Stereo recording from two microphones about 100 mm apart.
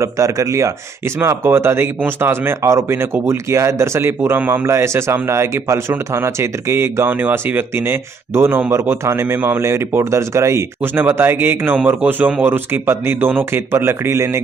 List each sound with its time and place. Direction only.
0.0 s speech: 30° right (ahead or behind)